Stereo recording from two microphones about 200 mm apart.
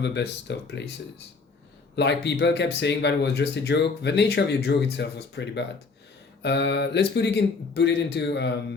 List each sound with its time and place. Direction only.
0.0 s speech: 60° left (ahead or behind)
2.0 s speech: 60° left (ahead or behind)